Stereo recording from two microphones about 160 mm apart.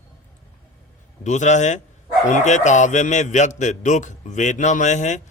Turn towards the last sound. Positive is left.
turn(degrees=50)  # may be behind; listen again after turning